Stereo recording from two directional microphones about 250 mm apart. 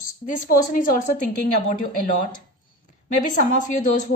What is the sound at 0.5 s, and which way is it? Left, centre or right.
Speech, left.